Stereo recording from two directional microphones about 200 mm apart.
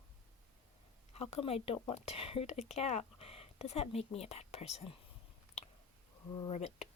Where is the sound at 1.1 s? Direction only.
30° left (ahead or behind).